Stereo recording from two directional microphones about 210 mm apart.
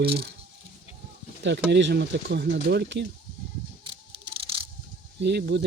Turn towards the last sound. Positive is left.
turn(degrees=-50)  # may be behind; listen again after turning